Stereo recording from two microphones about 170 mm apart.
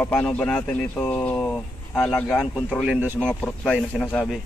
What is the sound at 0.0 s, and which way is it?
Speech, 10° left (ahead or behind).